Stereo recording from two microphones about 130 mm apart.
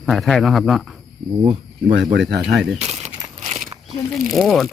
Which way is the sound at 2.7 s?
55° right (ahead or behind).